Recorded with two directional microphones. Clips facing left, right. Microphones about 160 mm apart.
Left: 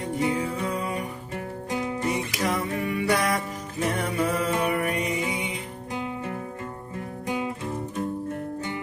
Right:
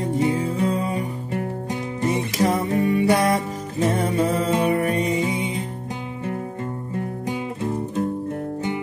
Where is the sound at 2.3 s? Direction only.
30° right (ahead or behind).